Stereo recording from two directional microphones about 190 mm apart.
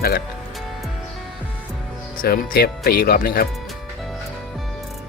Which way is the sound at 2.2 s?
50° left (ahead or behind).